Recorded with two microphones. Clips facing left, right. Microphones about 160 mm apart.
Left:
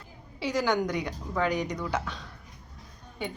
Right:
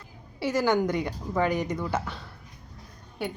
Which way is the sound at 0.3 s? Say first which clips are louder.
Right 2 dB; 15° left (ahead or behind).